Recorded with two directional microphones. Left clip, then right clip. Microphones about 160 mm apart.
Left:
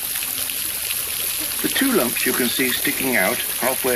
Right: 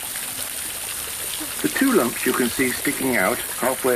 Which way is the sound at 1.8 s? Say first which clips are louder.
Even; 30° right (ahead or behind).